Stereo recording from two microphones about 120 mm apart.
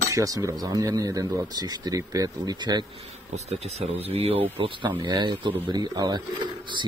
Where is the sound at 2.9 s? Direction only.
60° right (ahead or behind); by 6.2 s 35° right (ahead or behind).